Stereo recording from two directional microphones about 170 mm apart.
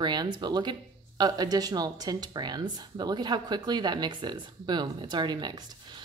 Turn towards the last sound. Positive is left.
turn(degrees=-25)  # may be behind; listen again after turning